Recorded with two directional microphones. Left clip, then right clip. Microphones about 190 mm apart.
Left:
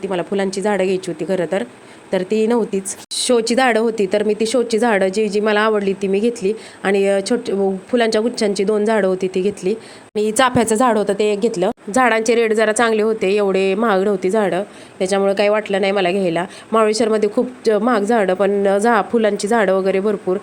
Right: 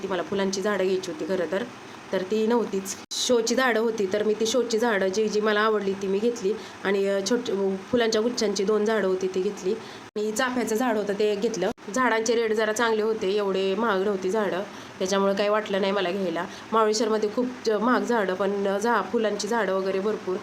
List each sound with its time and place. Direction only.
0.1 s speech: 35° left (ahead or behind)